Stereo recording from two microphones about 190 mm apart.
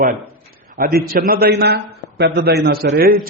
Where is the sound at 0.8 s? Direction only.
50° right (ahead or behind).